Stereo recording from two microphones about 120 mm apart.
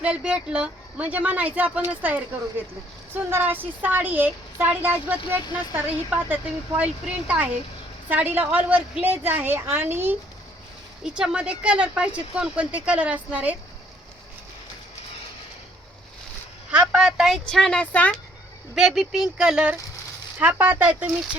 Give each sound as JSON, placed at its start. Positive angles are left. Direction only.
{"t": 0.0, "sound": "speech", "side_deg": -10}
{"t": 11.0, "sound": "speech", "side_deg": -5}
{"t": 16.7, "sound": "speech", "side_deg": -10}
{"t": 18.7, "sound": "speech", "side_deg": -5}